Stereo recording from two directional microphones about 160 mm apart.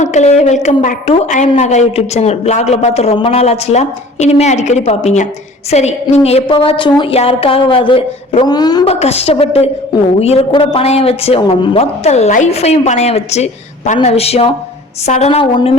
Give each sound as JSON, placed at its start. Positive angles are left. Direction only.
{"t": 0.0, "sound": "a woman's voice", "side_deg": 45}
{"t": 8.9, "sound": "a woman's voice", "side_deg": 40}